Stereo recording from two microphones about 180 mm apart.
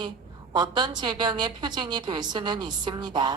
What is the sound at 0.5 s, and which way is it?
A woman's voice, 25° right (ahead or behind).